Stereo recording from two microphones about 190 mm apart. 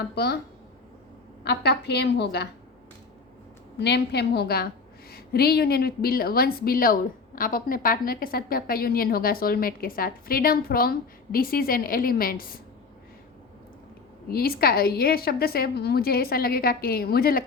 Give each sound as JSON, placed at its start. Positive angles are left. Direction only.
{"t": 0.1, "sound": "a woman's voice", "side_deg": 60}
{"t": 1.5, "sound": "a woman's voice", "side_deg": 60}
{"t": 3.8, "sound": "a woman's voice", "side_deg": 60}
{"t": 14.3, "sound": "a woman's voice", "side_deg": 55}